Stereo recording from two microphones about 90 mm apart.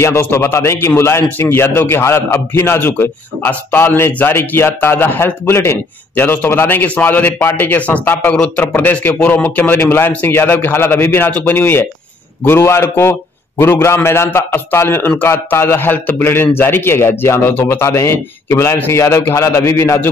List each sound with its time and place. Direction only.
0.0 s a man's voice: 30° left (ahead or behind)